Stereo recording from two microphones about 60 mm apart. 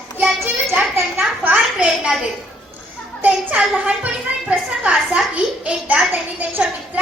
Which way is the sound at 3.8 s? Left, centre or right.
Right.